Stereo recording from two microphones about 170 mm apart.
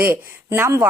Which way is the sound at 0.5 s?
15° right (ahead or behind).